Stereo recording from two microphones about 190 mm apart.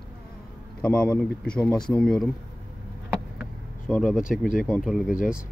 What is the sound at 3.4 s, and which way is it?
Vehicle, centre (ahead or behind).